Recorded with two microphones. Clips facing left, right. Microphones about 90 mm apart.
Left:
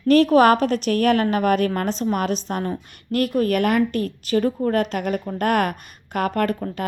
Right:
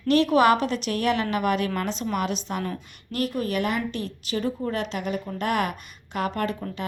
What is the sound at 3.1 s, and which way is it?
A woman's voice, 50° left (ahead or behind).